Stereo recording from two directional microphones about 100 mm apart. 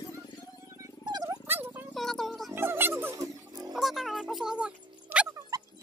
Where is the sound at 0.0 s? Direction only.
35° left (ahead or behind).